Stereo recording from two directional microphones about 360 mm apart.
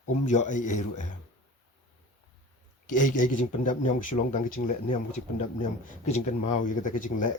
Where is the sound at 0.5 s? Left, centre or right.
Centre.